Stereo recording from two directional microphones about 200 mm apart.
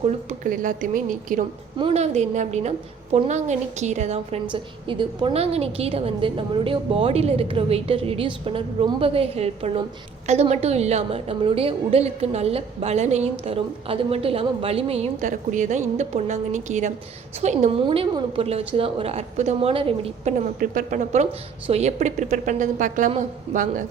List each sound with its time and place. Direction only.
0.3 s a woman's voice: 40° right (ahead or behind)
20.6 s a woman's voice: 40° right (ahead or behind)